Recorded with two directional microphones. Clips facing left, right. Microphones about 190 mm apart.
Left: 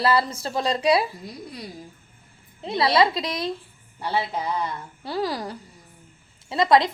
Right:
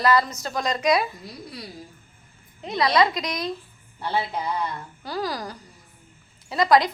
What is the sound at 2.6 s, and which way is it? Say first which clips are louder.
Speech: left 1 dB; 30° left (ahead or behind).